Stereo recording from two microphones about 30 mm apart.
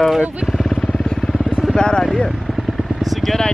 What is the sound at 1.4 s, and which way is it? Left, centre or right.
Vehicle, centre.